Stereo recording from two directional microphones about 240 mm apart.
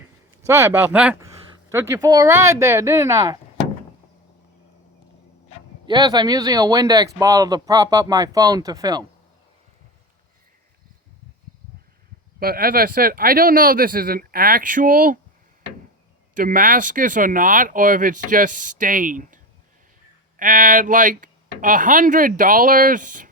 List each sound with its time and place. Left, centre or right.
0.4 s speech: centre
5.8 s speech: centre
12.4 s speech: right
16.3 s speech: right